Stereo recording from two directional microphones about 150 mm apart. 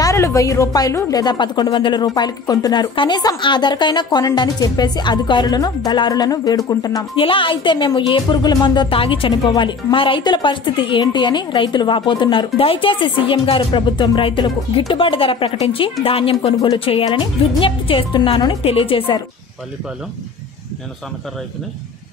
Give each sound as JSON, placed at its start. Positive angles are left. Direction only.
{"t": 0.0, "sound": "a woman's voice", "side_deg": 20}
{"t": 7.2, "sound": "speech", "side_deg": 35}